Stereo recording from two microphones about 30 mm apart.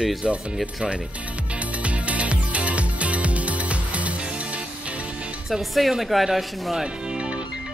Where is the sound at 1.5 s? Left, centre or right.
Right.